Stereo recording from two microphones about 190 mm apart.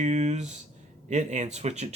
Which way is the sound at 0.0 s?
40° right (ahead or behind).